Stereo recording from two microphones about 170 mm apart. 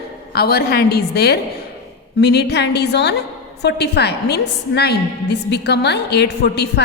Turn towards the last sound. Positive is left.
turn(degrees=80)